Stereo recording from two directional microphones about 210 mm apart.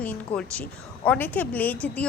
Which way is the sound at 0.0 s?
5° left (ahead or behind).